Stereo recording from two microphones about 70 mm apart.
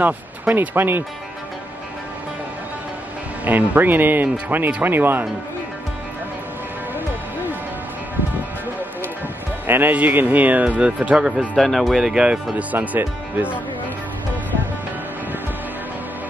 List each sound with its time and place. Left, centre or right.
0.0 s speech: right
3.4 s speech: right
9.7 s speech: right
11.2 s speech: centre
12.1 s speech: centre
12.7 s speech: right